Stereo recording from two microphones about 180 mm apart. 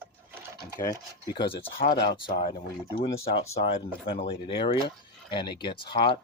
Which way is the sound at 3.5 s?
30° left (ahead or behind).